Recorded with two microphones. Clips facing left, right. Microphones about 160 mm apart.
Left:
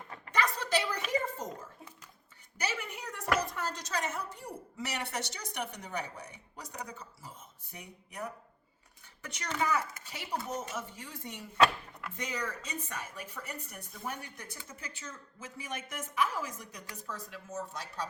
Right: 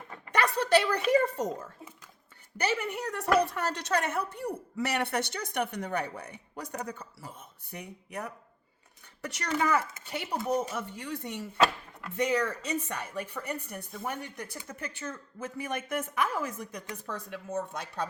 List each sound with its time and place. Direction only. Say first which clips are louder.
0.3 s speech: right 6 dB; 65° right (ahead or behind)
2.6 s speech: right 7 dB; 60° right (ahead or behind)